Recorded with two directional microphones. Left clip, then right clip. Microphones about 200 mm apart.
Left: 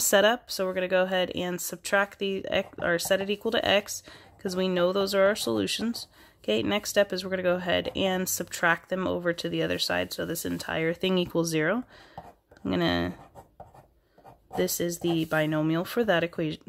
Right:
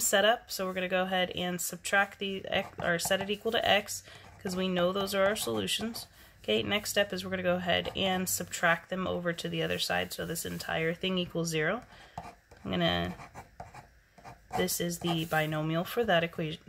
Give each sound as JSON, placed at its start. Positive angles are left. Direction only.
{"t": 0.0, "sound": "speech", "side_deg": 50}
{"t": 14.6, "sound": "speech", "side_deg": 45}